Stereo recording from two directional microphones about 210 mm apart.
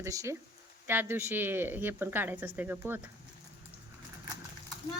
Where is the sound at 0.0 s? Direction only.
15° right (ahead or behind).